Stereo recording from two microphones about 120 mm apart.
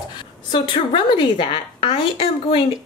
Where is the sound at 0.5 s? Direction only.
40° left (ahead or behind).